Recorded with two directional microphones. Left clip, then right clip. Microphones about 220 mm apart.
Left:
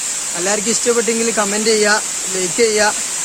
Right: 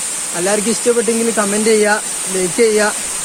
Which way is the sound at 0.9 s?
15° left (ahead or behind).